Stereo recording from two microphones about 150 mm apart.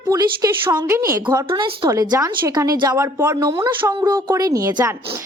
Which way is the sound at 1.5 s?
35° right (ahead or behind).